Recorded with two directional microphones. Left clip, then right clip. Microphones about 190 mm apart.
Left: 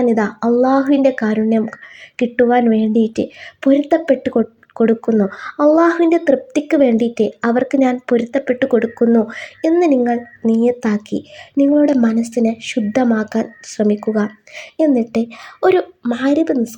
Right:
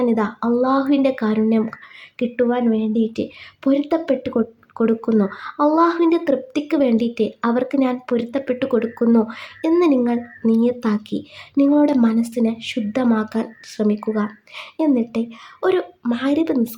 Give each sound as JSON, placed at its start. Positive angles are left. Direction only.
{"t": 0.0, "sound": "a woman's voice", "side_deg": 10}
{"t": 5.3, "sound": "a woman's voice", "side_deg": 15}